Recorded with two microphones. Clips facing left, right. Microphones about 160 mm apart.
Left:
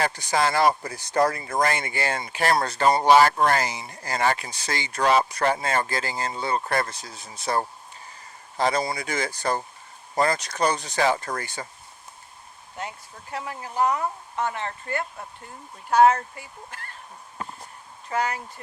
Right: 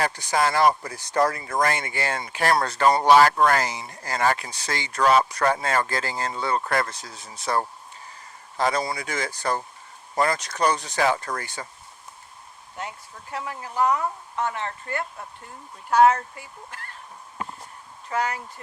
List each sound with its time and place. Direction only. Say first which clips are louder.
0.0 s speech: even; 30° left (ahead or behind)
8.5 s speech: even; 30° left (ahead or behind)
13.3 s speech: even; 30° left (ahead or behind)
18.1 s speech: even; 30° left (ahead or behind)